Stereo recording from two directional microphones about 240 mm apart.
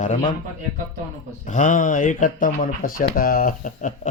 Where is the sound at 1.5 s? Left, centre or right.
Left.